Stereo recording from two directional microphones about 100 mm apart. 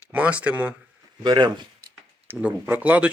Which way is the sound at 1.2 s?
45° right (ahead or behind).